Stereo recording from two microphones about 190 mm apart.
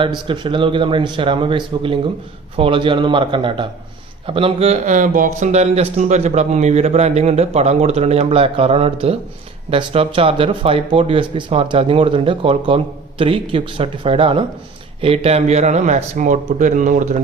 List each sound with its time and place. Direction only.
0.0 s speech: 25° right (ahead or behind); by 17.2 s 40° right (ahead or behind)